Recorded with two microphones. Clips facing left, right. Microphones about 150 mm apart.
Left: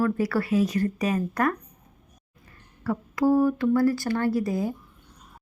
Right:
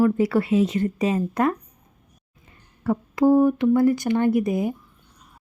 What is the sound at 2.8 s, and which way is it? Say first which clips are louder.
A woman's voice: right 4 dB; 25° right (ahead or behind).